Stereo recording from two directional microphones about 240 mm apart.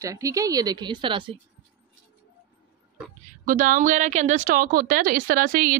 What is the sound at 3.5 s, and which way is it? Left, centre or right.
A woman's voice, right.